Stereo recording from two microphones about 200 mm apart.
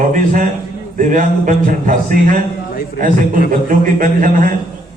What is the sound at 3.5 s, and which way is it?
A man's voice, 45° right (ahead or behind).